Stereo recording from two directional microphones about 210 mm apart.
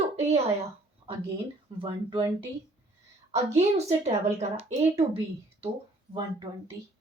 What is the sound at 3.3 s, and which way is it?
A woman's voice, 30° right (ahead or behind).